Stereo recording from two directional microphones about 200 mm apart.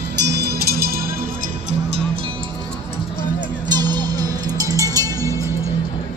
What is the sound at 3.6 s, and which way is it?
Music, 20° right (ahead or behind).